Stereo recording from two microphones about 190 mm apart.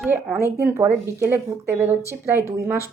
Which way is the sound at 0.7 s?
10° right (ahead or behind).